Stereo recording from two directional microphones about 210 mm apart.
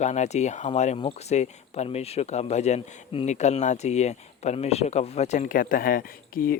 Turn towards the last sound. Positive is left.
turn(degrees=45)  # may be behind; listen again after turning